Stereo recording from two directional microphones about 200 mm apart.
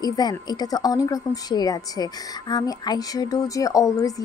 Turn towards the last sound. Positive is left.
turn(degrees=15)  # may be behind; listen again after turning